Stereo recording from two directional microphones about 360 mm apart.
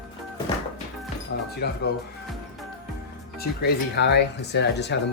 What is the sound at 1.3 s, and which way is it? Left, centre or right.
Speech, left.